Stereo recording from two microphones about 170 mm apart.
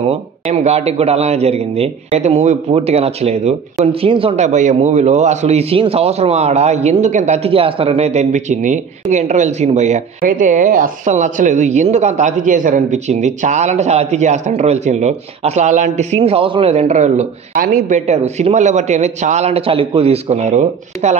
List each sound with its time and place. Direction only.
0.1 s speech: 40° right (ahead or behind)